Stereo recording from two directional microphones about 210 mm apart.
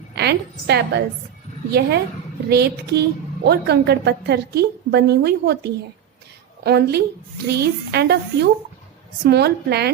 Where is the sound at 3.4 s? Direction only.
50° right (ahead or behind).